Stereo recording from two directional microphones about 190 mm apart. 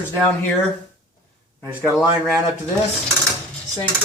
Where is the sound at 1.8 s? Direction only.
Centre (ahead or behind).